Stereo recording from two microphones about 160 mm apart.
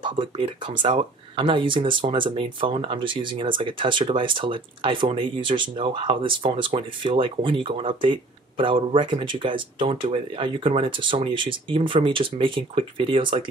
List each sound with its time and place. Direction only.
0.0 s speech: 30° right (ahead or behind)